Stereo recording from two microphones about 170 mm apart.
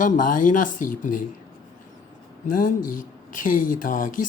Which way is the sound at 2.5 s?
55° left (ahead or behind).